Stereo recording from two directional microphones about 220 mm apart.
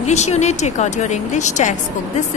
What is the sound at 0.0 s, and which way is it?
A woman's voice, 30° left (ahead or behind).